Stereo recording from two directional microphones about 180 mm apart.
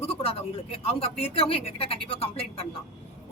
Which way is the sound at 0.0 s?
30° left (ahead or behind).